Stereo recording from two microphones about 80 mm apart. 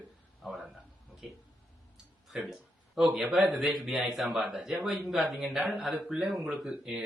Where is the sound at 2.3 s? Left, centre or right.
Centre.